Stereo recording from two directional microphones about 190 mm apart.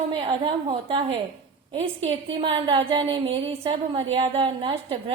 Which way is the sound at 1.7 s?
30° right (ahead or behind).